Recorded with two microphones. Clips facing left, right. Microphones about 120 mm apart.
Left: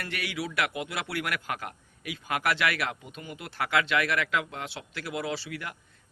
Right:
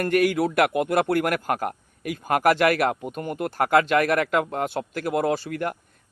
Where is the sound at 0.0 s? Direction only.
50° right (ahead or behind).